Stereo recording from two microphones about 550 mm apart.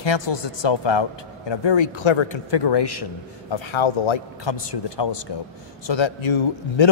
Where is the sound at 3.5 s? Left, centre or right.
Left.